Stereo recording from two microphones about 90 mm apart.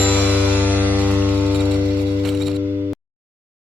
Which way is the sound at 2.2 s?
Centre (ahead or behind).